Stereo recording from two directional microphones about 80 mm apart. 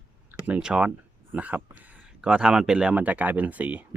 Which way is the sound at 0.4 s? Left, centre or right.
Centre.